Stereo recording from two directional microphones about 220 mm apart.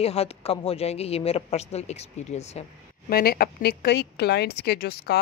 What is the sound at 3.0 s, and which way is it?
A woman's voice, 45° left (ahead or behind).